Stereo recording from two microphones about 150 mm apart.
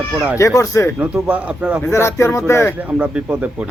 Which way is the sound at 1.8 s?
15° left (ahead or behind).